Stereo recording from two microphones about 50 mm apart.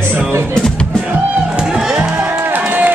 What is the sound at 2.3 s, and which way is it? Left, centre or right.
Music, right.